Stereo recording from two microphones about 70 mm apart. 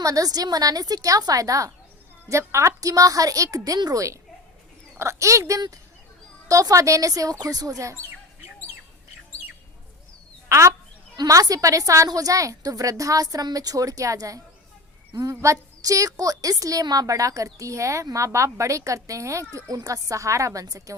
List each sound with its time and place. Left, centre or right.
0.0 s a woman's voice: right
2.4 s a woman's voice: right
10.5 s a woman's voice: right
11.3 s a woman's voice: right